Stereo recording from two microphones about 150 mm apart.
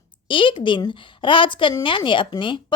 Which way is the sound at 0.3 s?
35° left (ahead or behind).